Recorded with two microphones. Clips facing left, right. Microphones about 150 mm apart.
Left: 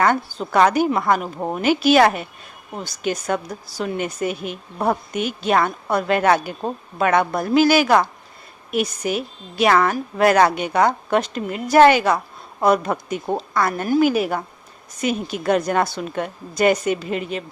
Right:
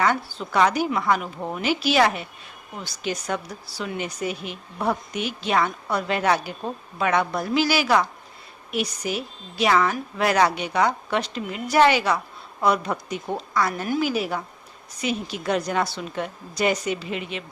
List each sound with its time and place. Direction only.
0.0 s a woman's voice: 45° left (ahead or behind)